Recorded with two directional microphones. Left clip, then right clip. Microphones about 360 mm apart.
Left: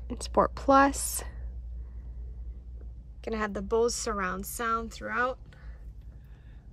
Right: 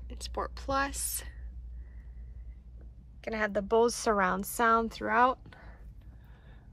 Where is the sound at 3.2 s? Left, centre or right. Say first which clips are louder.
Right 1 dB; centre.